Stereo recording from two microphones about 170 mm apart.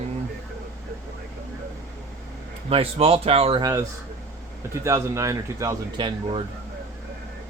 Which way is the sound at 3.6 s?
20° right (ahead or behind).